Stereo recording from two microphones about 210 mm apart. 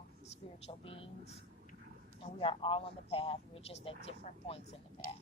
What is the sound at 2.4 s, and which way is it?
A man's voice, 25° left (ahead or behind).